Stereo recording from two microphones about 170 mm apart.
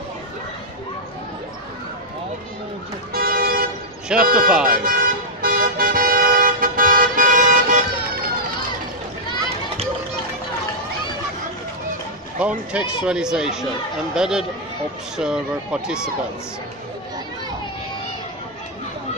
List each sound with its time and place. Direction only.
3.1 s vehicle: 60° right (ahead or behind)
4.2 s speech: 60° right (ahead or behind)
4.6 s vehicle: 55° right (ahead or behind)
12.4 s speech: 5° right (ahead or behind)